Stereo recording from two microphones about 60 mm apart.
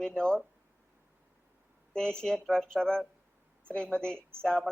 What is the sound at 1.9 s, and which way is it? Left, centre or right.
A man's voice, centre.